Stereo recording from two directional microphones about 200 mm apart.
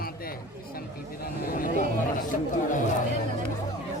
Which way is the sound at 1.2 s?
45° left (ahead or behind).